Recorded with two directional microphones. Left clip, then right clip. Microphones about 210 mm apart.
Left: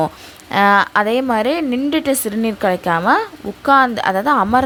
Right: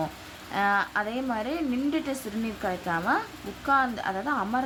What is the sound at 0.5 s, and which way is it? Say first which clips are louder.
A woman's voice: left 13 dB; 45° left (ahead or behind).